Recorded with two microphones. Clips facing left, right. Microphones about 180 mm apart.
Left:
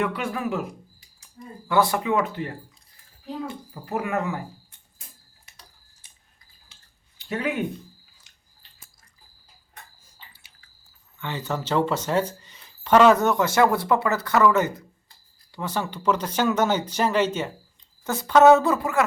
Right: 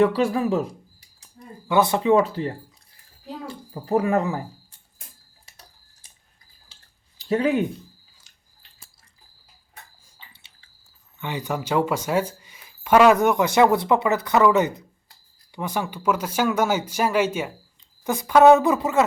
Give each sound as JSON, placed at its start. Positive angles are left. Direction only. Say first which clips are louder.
{"t": 0.0, "sound": "speech", "louder": "right 7 dB", "side_deg": -35}
{"t": 1.6, "sound": "speech", "louder": "right 3 dB", "side_deg": -20}
{"t": 7.2, "sound": "speech", "louder": "right 6 dB", "side_deg": -30}
{"t": 10.3, "sound": "a sound", "louder": "even", "side_deg": -25}
{"t": 11.2, "sound": "speech", "louder": "right 2 dB", "side_deg": -15}